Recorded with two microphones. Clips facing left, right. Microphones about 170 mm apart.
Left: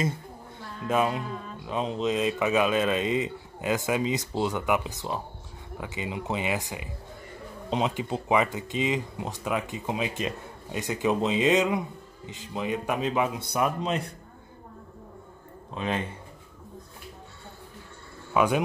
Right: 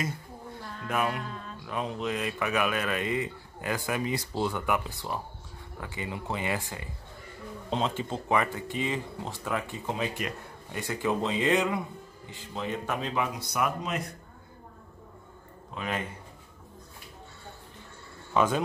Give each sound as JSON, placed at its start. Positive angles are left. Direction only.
{"t": 0.8, "sound": "a man's voice", "side_deg": 25}
{"t": 15.7, "sound": "a man's voice", "side_deg": 25}
{"t": 18.3, "sound": "speech", "side_deg": 15}